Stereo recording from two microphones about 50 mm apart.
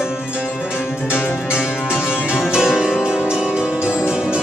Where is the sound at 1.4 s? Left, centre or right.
Centre.